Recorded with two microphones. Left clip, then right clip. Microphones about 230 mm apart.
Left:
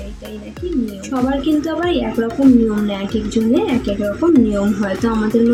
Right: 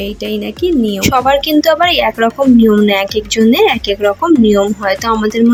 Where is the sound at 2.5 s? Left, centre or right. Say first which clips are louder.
Even; centre.